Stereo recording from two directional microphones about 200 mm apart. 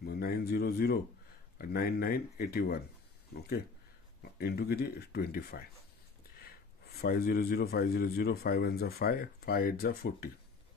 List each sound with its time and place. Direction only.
0.0 s a man's voice: 50° left (ahead or behind)
4.2 s a man's voice: 55° left (ahead or behind)